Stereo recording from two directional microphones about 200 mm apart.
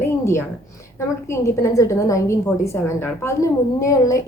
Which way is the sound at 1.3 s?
15° left (ahead or behind).